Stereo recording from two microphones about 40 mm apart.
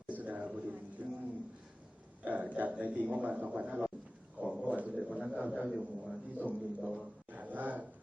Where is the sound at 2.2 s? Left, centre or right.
Right.